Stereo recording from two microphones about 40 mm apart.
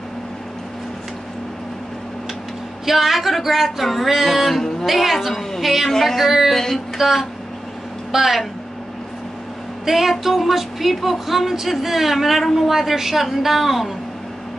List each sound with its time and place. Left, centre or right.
2.8 s speech: centre
6.5 s a sound: centre
7.0 s a woman's voice: centre
9.8 s speech: centre